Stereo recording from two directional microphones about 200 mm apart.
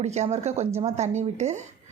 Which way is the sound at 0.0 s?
35° right (ahead or behind).